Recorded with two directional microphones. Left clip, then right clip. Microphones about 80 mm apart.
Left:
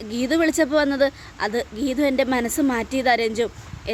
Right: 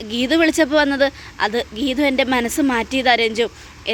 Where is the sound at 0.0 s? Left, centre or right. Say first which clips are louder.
Right 4 dB; left.